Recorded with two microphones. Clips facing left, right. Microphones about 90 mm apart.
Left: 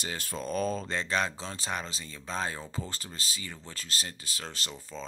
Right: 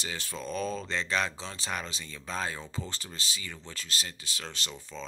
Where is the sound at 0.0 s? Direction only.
45° left (ahead or behind).